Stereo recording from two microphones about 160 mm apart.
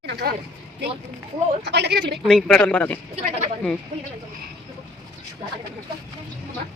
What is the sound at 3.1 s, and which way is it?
Speech, 45° right (ahead or behind).